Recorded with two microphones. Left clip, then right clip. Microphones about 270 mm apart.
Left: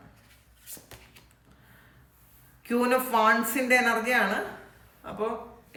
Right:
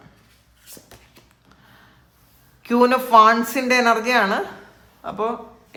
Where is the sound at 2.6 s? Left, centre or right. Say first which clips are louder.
Right 8 dB; centre.